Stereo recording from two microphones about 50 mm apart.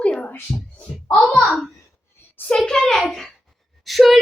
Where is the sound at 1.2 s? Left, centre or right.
Centre.